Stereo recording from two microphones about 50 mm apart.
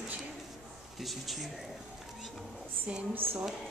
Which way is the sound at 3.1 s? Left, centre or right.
Right.